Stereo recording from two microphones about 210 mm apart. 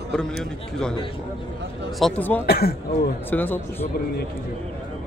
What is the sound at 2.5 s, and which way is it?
Speech, 45° left (ahead or behind).